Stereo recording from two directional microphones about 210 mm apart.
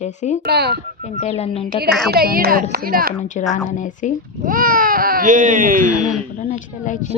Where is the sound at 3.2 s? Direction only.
35° left (ahead or behind).